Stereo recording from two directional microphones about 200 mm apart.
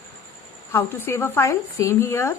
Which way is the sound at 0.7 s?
10° left (ahead or behind).